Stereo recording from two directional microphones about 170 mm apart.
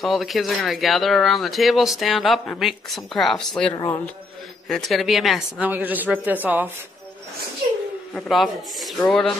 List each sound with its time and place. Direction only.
0.0 s speech: centre (ahead or behind)
3.7 s speech: 20° left (ahead or behind)
4.6 s speech: centre (ahead or behind)
8.1 s speech: centre (ahead or behind)